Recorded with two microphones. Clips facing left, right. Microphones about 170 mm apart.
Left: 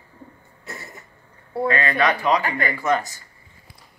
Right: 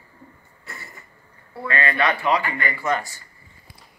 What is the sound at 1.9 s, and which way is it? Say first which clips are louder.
Speech: even; 15° left (ahead or behind).